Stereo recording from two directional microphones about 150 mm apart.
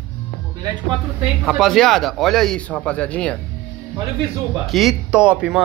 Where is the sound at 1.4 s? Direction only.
Centre (ahead or behind).